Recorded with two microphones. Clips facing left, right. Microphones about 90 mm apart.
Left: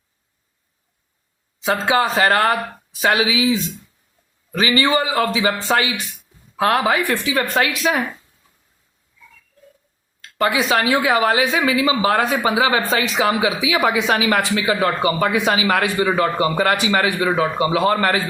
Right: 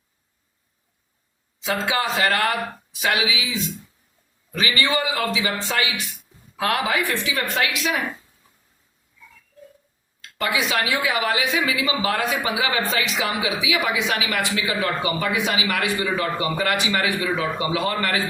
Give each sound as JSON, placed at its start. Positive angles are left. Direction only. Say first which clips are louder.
{"t": 1.7, "sound": "speech", "louder": "left 5 dB", "side_deg": 35}
{"t": 10.2, "sound": "speech", "louder": "left 5 dB", "side_deg": 35}